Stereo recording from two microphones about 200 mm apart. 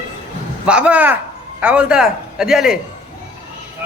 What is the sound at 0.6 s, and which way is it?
Speech, 5° right (ahead or behind).